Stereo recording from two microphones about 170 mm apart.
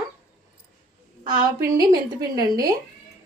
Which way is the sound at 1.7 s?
25° right (ahead or behind).